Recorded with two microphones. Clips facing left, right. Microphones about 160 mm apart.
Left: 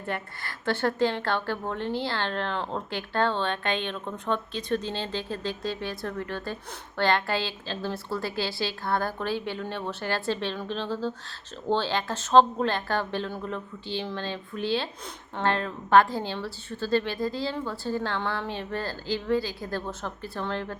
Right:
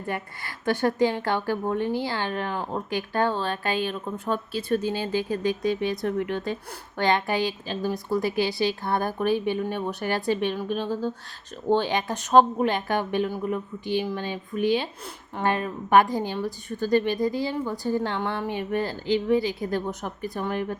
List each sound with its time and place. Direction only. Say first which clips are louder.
0.6 s speech: right 3 dB; 15° right (ahead or behind)